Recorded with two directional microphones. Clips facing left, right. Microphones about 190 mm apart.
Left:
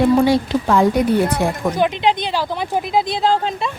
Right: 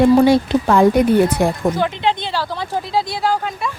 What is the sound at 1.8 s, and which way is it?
Speech, 15° left (ahead or behind).